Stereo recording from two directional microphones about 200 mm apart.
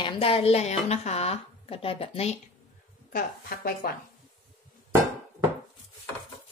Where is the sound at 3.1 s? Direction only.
45° left (ahead or behind).